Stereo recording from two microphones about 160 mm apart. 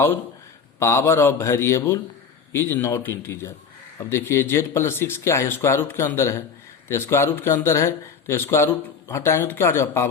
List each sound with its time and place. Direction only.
0.8 s a man's voice: 15° left (ahead or behind)